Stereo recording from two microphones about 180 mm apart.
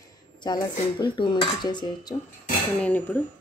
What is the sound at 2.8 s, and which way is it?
Speech, 10° left (ahead or behind).